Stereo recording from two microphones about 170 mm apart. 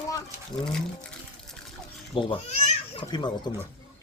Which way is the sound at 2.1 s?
35° left (ahead or behind).